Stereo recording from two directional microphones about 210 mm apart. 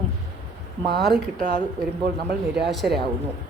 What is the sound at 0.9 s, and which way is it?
Speech, 50° right (ahead or behind).